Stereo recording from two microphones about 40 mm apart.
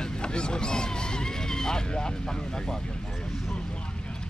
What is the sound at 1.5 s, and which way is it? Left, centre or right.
Vehicle, centre.